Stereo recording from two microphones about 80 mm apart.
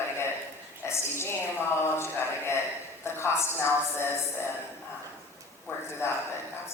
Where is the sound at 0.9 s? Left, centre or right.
Left.